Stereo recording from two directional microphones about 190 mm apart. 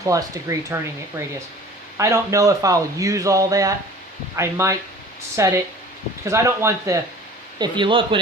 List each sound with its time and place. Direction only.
0.0 s speech: 15° right (ahead or behind)
2.0 s speech: 15° right (ahead or behind)
7.6 s speech: 25° right (ahead or behind)